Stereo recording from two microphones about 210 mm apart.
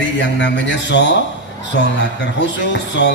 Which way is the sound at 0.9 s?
55° left (ahead or behind).